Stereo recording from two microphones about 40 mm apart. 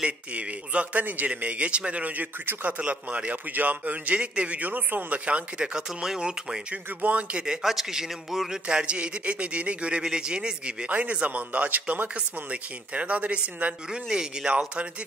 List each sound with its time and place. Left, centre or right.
0.0 s a man's voice: right
1.0 s speech: right
1.3 s a man's voice: right
4.6 s speech: right
5.2 s speech: right
6.7 s a man's voice: right
7.3 s a man's voice: centre
8.6 s speech: right
10.9 s a man's voice: right
12.2 s a man's voice: right
13.8 s speech: centre